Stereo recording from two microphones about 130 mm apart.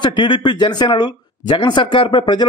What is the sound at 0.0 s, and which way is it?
A man's voice, 35° left (ahead or behind).